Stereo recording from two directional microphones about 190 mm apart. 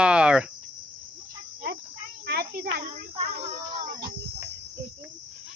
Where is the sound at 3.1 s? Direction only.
35° right (ahead or behind).